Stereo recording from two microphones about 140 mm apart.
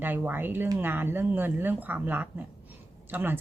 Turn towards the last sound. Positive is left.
turn(degrees=-15)  # may be behind; listen again after turning